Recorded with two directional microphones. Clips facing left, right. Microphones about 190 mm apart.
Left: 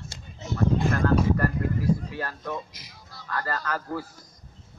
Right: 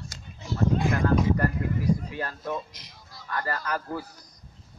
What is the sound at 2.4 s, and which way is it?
Speech, centre (ahead or behind).